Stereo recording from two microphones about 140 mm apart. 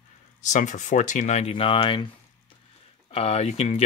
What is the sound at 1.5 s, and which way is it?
Speech, 40° left (ahead or behind).